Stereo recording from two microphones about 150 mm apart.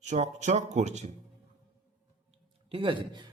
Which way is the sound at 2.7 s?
35° right (ahead or behind).